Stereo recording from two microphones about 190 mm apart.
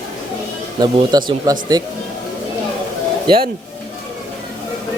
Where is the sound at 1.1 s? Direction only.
20° right (ahead or behind).